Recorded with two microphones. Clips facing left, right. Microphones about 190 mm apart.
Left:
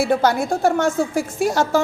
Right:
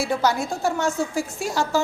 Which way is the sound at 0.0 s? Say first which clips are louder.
Left 5 dB; 55° left (ahead or behind).